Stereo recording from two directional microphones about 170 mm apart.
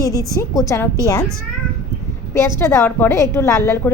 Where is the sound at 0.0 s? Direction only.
20° left (ahead or behind).